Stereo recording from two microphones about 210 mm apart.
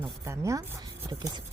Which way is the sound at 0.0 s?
15° right (ahead or behind).